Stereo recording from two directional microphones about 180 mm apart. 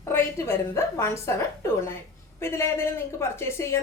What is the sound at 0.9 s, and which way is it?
A woman's voice, 15° left (ahead or behind).